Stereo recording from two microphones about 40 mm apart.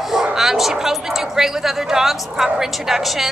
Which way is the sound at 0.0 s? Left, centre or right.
Centre.